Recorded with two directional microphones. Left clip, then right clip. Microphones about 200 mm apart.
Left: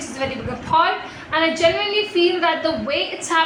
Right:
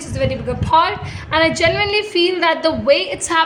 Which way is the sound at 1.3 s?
55° right (ahead or behind).